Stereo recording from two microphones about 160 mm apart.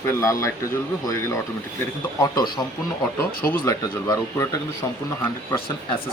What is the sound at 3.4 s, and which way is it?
Speech, 15° left (ahead or behind).